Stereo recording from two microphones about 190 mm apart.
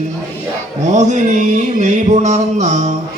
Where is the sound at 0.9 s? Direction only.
40° right (ahead or behind).